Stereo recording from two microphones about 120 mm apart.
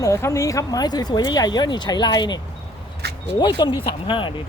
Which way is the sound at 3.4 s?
40° left (ahead or behind).